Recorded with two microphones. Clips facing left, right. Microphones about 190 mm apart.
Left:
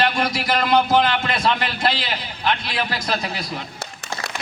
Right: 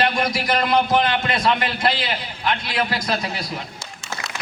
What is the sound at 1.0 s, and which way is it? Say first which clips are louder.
Speech: even; 25° right (ahead or behind).